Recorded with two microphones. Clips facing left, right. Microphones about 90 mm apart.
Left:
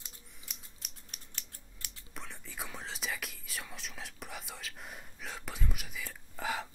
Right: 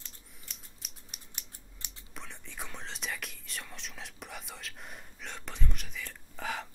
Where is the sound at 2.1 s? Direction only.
Centre (ahead or behind).